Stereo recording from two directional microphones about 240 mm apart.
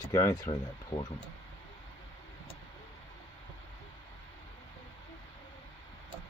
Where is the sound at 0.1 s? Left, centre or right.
Centre.